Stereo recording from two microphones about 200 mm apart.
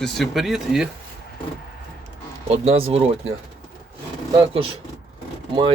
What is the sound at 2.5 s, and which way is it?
Speech, 30° right (ahead or behind).